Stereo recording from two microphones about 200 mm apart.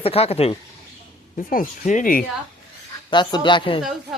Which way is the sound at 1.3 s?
40° left (ahead or behind).